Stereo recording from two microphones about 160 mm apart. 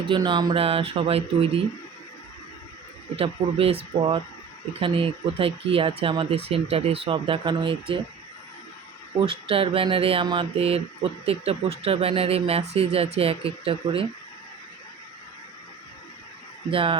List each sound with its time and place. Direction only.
0.0 s speech: 30° right (ahead or behind)
3.2 s speech: 35° right (ahead or behind)
9.1 s speech: 35° right (ahead or behind)
16.7 s speech: 35° right (ahead or behind)